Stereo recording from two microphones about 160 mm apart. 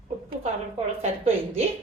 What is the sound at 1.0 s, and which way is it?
Speech, 40° right (ahead or behind).